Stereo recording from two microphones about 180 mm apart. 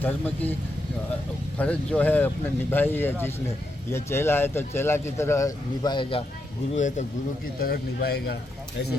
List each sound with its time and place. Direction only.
0.0 s speech: 10° left (ahead or behind)
1.5 s speech: 5° left (ahead or behind); by 6.2 s 30° left (ahead or behind)
6.7 s speech: 40° left (ahead or behind)
7.6 s a man's voice: 60° left (ahead or behind)